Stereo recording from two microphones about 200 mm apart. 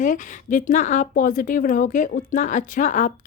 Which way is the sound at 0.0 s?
40° left (ahead or behind).